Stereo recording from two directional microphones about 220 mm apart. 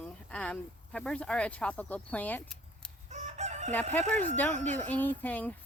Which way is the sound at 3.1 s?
30° right (ahead or behind).